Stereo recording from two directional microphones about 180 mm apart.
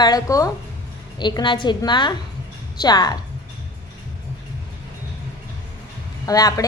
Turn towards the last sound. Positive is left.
turn(degrees=20)  # may be behind; listen again after turning